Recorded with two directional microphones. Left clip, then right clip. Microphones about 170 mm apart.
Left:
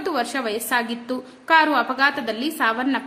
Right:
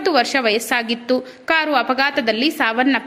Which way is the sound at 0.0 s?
20° right (ahead or behind).